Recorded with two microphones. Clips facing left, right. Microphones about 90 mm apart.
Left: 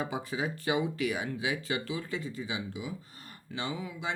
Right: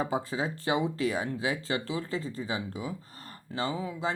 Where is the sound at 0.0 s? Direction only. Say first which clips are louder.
Right 3 dB; 30° right (ahead or behind).